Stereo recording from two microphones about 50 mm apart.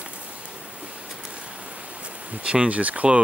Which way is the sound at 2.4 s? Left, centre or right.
Right.